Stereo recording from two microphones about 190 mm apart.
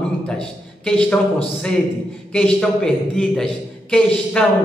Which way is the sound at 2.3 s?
5° left (ahead or behind).